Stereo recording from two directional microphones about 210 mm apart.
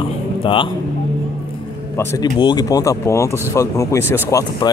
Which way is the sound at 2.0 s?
10° left (ahead or behind).